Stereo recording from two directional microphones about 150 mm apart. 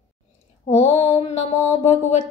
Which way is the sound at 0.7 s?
45° left (ahead or behind).